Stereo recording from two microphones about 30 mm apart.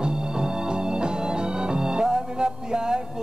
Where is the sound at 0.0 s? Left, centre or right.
Right.